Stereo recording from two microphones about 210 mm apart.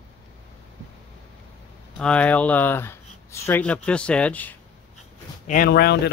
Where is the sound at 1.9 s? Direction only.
5° left (ahead or behind).